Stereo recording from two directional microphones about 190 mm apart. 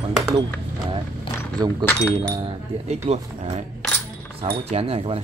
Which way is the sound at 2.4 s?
35° right (ahead or behind).